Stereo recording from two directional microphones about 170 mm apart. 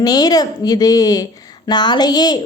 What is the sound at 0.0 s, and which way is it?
A woman's voice, 20° left (ahead or behind).